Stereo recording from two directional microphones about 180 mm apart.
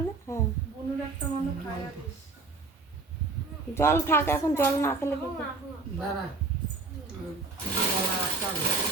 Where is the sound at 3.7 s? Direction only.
15° left (ahead or behind).